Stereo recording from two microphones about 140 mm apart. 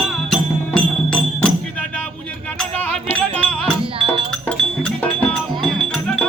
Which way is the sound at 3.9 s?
40° right (ahead or behind).